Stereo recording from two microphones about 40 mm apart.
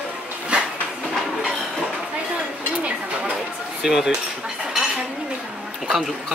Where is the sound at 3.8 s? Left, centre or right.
Centre.